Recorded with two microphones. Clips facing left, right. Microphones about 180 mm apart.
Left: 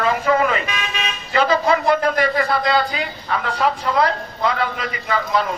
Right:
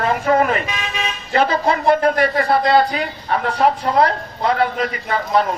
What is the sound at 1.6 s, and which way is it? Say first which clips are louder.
Speech: right 2 dB; 30° right (ahead or behind).